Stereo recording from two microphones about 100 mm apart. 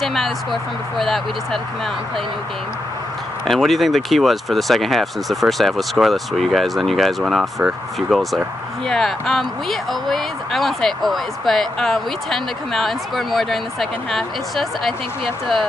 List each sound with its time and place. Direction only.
0.0 s speech: centre (ahead or behind)
3.4 s speech: centre (ahead or behind)